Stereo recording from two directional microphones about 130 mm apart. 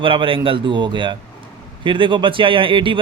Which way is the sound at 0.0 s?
40° right (ahead or behind).